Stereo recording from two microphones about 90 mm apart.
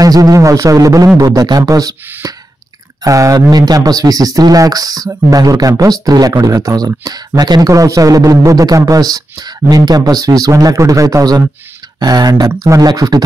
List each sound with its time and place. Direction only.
0.0 s a man's voice: 40° right (ahead or behind)
3.3 s a man's voice: 50° right (ahead or behind)